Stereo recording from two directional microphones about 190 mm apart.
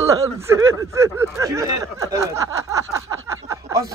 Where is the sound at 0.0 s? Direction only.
15° right (ahead or behind).